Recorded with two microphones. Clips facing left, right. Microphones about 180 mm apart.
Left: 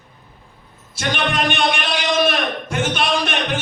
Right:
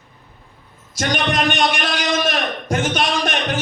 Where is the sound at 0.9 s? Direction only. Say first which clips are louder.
Right 1 dB; 40° right (ahead or behind).